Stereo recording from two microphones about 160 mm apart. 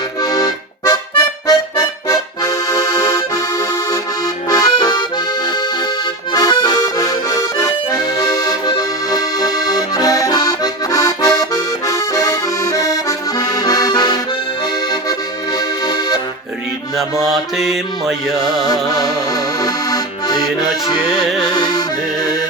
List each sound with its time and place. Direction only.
0.2 s accordion: 25° left (ahead or behind)
15.5 s accordion: 25° left (ahead or behind)
17.0 s music: centre (ahead or behind)
18.6 s accordion: 25° left (ahead or behind)
20.8 s music: 25° left (ahead or behind)
21.2 s music: centre (ahead or behind)
21.5 s music: 25° left (ahead or behind)